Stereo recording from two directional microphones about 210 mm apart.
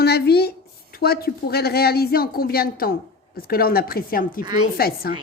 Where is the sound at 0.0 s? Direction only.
50° left (ahead or behind).